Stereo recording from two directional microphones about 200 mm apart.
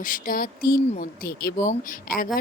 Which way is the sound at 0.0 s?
40° left (ahead or behind).